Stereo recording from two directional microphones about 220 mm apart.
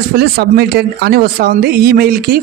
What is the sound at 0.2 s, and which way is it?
Speech, 45° right (ahead or behind).